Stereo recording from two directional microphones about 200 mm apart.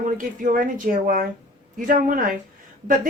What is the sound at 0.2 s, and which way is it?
A woman's voice, 40° right (ahead or behind).